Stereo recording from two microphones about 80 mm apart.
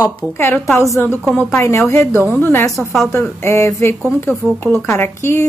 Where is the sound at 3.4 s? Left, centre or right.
Left.